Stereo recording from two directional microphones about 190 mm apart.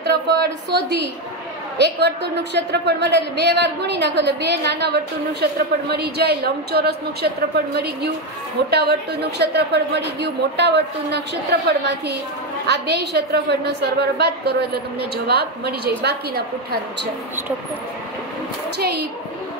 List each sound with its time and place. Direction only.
0.0 s a woman's voice: 60° right (ahead or behind)
18.8 s a woman's voice: 55° right (ahead or behind)